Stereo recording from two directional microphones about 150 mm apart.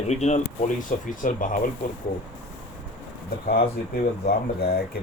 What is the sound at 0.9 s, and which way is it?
Speech, 60° left (ahead or behind).